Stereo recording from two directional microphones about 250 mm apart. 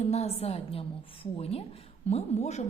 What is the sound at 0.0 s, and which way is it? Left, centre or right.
A woman's voice, left.